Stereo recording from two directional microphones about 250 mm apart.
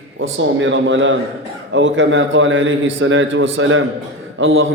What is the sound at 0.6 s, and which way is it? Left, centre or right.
A man's voice, right.